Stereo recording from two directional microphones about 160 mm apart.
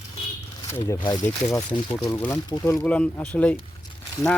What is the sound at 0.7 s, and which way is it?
Speech, 20° left (ahead or behind).